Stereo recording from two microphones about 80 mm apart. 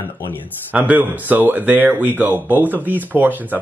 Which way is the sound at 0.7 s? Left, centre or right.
Centre.